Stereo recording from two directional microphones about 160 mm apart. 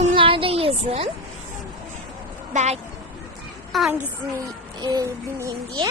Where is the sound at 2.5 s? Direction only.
45° right (ahead or behind).